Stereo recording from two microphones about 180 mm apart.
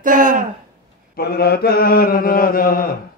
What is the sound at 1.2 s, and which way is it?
Mantra, 60° left (ahead or behind).